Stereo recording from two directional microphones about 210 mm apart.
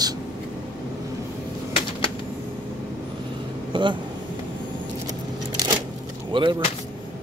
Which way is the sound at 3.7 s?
20° right (ahead or behind).